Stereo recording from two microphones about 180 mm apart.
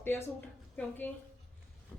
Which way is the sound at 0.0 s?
10° left (ahead or behind).